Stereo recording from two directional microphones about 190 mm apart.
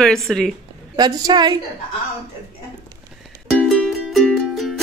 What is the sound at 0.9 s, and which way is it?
Speech, 20° right (ahead or behind).